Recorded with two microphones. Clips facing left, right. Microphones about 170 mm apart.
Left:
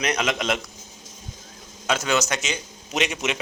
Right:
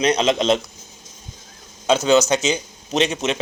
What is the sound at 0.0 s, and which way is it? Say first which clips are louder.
Speech: right 7 dB; 30° right (ahead or behind).